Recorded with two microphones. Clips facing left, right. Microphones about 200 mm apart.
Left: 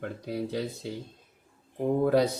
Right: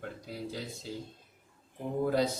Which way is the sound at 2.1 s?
65° left (ahead or behind).